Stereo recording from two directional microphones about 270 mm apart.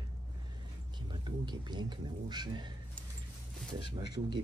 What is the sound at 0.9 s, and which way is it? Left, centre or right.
Speech, centre.